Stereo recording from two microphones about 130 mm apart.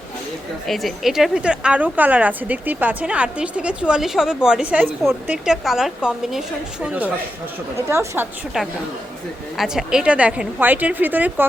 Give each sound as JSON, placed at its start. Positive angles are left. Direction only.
{"t": 0.7, "sound": "a woman's voice", "side_deg": 0}
{"t": 8.5, "sound": "a woman's voice", "side_deg": -5}